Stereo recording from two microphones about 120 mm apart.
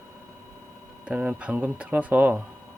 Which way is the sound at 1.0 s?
10° right (ahead or behind).